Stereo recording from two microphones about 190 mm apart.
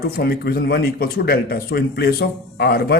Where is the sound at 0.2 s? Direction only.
55° left (ahead or behind).